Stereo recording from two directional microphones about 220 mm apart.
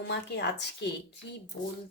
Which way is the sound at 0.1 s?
50° left (ahead or behind).